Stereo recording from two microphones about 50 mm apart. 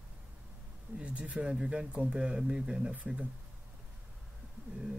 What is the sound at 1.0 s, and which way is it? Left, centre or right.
Speech, right.